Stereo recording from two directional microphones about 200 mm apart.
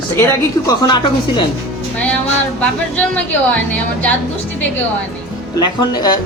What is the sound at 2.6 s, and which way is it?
Speech, 5° left (ahead or behind).